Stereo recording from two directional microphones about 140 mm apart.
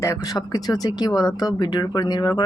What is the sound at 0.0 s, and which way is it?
Speech, 25° left (ahead or behind).